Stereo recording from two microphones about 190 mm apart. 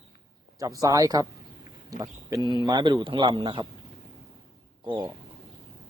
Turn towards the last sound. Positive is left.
turn(degrees=-25)  # may be behind; listen again after turning